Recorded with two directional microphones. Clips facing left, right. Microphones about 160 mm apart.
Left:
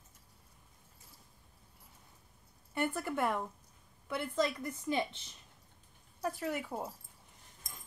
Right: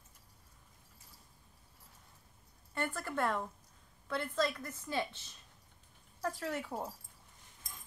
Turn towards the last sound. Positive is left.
turn(degrees=0)  # may be behind; listen again after turning